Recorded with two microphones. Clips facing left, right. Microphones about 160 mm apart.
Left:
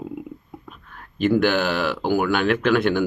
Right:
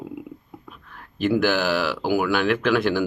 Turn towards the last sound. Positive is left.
turn(degrees=0)  # may be behind; listen again after turning